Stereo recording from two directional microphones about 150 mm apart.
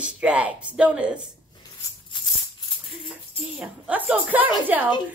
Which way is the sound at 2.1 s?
30° left (ahead or behind).